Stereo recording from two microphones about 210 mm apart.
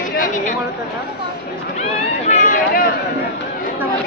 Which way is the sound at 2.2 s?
35° left (ahead or behind).